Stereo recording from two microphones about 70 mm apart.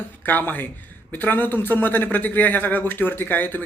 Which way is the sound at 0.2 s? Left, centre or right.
Left.